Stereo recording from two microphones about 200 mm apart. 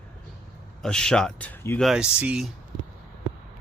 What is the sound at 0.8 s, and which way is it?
Speech, 5° left (ahead or behind).